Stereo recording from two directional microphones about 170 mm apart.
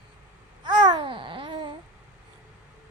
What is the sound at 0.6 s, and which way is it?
Babbling, 25° right (ahead or behind).